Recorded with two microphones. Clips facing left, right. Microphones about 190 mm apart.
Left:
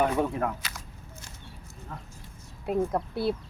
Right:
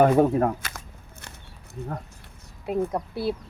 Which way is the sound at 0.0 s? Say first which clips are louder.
Right 8 dB; 40° right (ahead or behind).